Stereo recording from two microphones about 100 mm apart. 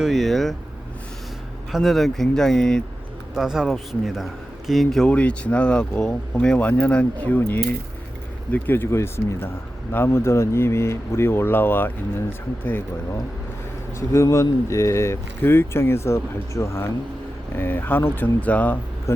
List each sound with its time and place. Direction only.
0.0 s speech: centre (ahead or behind)
1.7 s speech: centre (ahead or behind)
3.3 s a man's voice: 5° right (ahead or behind); by 11.9 s 20° left (ahead or behind)
14.1 s a man's voice: 30° left (ahead or behind)
19.1 s speech: 25° left (ahead or behind)